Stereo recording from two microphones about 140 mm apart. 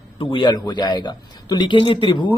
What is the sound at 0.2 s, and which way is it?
A man's voice, 35° left (ahead or behind).